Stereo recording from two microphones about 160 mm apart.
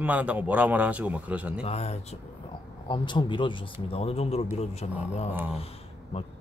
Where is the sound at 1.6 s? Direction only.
40° left (ahead or behind).